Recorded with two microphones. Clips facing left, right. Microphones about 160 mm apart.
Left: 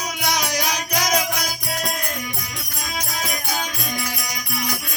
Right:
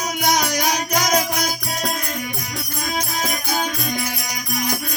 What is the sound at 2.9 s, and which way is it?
Music, 45° right (ahead or behind).